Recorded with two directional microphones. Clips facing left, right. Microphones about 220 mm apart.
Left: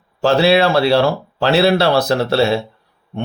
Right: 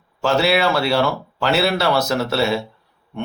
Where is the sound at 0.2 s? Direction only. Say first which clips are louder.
Left 5 dB; 30° left (ahead or behind).